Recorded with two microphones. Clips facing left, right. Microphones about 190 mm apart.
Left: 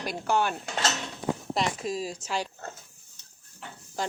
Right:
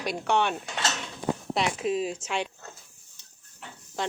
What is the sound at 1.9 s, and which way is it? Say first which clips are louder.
Speech: right 4 dB; 40° left (ahead or behind).